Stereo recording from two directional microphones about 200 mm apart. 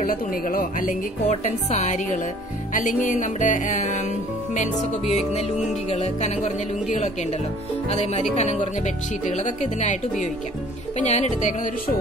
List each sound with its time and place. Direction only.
0.0 s a woman's voice: 45° left (ahead or behind)
11.0 s a woman's voice: 35° left (ahead or behind)